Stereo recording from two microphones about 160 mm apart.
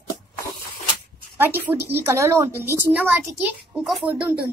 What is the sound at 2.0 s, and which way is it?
A woman's voice, 15° right (ahead or behind).